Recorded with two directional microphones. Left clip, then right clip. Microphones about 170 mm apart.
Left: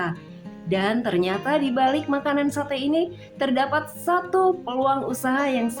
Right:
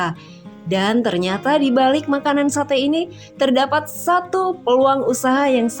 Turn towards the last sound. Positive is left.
turn(degrees=-35)  # may be behind; listen again after turning